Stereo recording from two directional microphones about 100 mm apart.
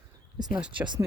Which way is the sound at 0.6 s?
10° right (ahead or behind).